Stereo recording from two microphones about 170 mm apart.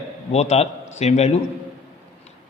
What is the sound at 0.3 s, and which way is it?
A man's voice, 40° left (ahead or behind).